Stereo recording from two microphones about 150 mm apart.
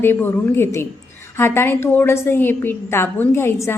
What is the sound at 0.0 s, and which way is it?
A woman's voice, 15° left (ahead or behind).